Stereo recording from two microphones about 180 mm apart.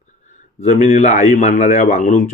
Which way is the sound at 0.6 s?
35° left (ahead or behind).